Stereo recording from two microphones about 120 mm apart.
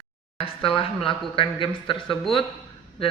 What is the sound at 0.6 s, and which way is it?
Speech, 50° left (ahead or behind).